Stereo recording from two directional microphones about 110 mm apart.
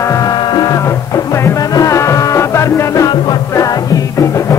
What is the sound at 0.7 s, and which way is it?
Music, 25° left (ahead or behind).